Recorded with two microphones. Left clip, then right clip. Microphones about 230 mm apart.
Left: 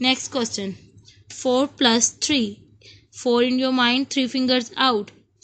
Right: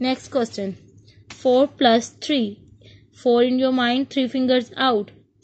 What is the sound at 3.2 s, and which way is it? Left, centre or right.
Speech, left.